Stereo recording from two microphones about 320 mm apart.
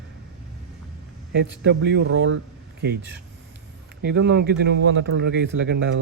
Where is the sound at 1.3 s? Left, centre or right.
Right.